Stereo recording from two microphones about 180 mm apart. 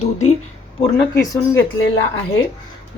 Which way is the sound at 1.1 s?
20° left (ahead or behind).